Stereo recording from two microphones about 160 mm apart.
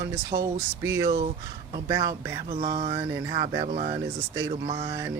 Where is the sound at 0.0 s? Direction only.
20° right (ahead or behind).